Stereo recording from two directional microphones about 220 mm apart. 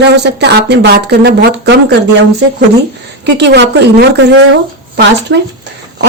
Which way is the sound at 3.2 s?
50° right (ahead or behind).